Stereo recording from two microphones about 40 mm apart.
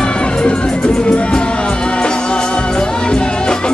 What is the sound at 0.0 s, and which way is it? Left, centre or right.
Music, left.